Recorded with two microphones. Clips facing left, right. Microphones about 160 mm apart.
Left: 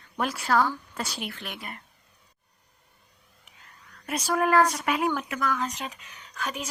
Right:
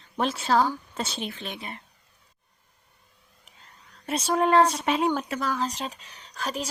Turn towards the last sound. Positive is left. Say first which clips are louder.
# right 2 dB
turn(degrees=-35)  # may be behind; listen again after turning